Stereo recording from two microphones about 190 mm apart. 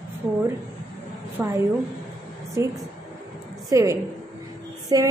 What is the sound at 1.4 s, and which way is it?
A woman's voice, 10° right (ahead or behind).